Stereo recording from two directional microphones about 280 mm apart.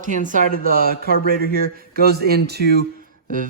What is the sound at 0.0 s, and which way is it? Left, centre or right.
Speech, right.